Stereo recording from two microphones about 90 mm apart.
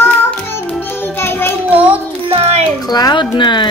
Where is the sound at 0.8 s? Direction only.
25° left (ahead or behind).